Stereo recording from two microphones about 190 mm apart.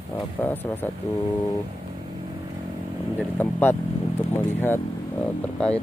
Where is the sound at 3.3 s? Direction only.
10° left (ahead or behind).